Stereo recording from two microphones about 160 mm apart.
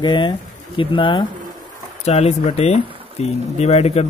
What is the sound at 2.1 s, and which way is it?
Speech, 40° left (ahead or behind).